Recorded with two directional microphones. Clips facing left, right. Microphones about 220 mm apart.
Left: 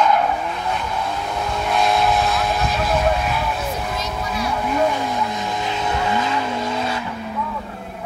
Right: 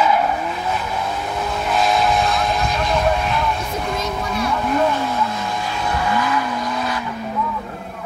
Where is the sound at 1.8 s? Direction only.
Centre (ahead or behind).